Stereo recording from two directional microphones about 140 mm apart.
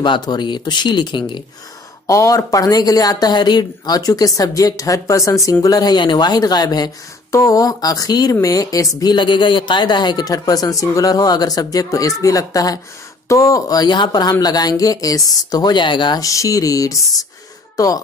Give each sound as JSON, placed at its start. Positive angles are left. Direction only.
{"t": 0.0, "sound": "speech", "side_deg": 30}
{"t": 2.0, "sound": "speech", "side_deg": 20}